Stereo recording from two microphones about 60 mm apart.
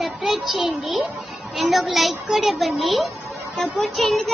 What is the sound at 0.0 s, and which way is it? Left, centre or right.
A child's voice, centre.